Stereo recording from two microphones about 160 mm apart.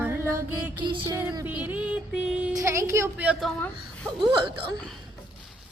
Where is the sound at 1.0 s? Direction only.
15° right (ahead or behind).